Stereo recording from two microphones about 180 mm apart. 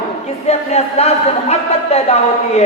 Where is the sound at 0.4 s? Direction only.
35° left (ahead or behind).